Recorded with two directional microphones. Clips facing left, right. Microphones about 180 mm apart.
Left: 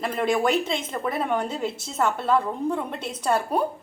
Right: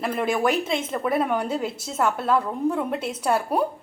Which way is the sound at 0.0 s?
5° right (ahead or behind).